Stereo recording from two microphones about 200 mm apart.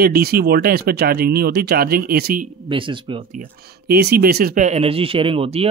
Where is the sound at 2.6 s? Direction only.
25° right (ahead or behind).